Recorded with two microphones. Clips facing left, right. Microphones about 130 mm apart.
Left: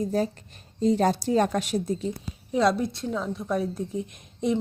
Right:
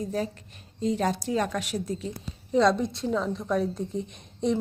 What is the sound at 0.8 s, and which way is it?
A woman's voice, 35° left (ahead or behind).